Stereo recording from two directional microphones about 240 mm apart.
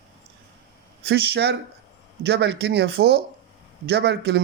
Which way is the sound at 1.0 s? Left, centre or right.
Right.